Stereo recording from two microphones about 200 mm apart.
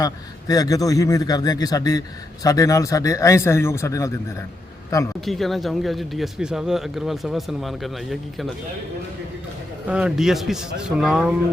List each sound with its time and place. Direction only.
0.0 s a man's voice: 20° left (ahead or behind)
5.2 s speech: centre (ahead or behind)
9.8 s speech: 5° right (ahead or behind)